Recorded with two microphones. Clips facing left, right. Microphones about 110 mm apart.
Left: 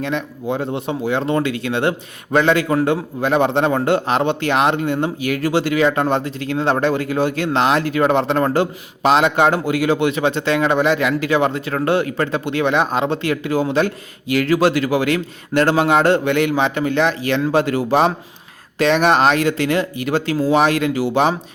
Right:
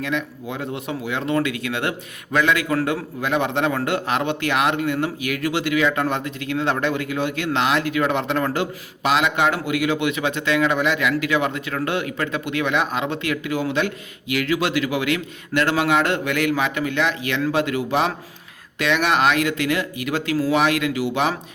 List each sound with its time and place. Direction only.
0.0 s speech: 30° left (ahead or behind)